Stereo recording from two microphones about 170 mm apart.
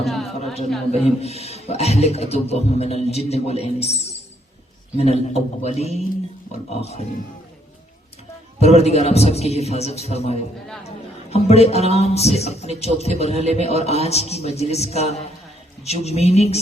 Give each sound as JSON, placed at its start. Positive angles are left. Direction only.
{"t": 0.0, "sound": "a woman's voice", "side_deg": 0}
{"t": 1.0, "sound": "a man's voice", "side_deg": 40}
{"t": 8.5, "sound": "a man's voice", "side_deg": 40}
{"t": 10.8, "sound": "music", "side_deg": 40}
{"t": 11.9, "sound": "a man's voice", "side_deg": 40}